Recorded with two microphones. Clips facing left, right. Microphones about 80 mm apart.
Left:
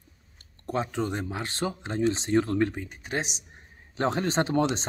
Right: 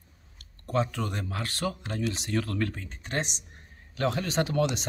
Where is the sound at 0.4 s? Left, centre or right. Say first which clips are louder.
Right 2 dB; left.